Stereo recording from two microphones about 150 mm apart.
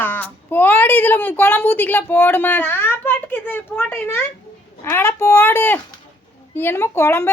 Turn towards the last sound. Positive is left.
turn(degrees=15)  # may be behind; listen again after turning